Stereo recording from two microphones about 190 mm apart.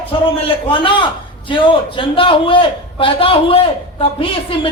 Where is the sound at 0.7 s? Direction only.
25° left (ahead or behind).